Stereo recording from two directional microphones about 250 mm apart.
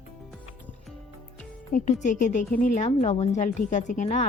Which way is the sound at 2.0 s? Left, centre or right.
Left.